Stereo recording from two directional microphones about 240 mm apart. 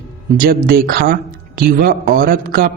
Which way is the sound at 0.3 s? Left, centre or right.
Right.